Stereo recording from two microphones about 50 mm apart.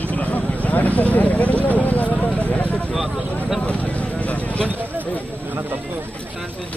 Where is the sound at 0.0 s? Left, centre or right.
Left.